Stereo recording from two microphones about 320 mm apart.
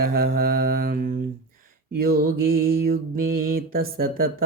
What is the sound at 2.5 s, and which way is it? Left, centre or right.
Mantra, right.